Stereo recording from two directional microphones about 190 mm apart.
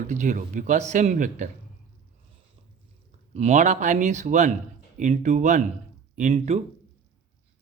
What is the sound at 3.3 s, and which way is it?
Speech, 40° right (ahead or behind).